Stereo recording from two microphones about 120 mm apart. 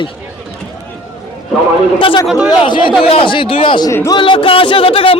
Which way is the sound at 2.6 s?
45° left (ahead or behind).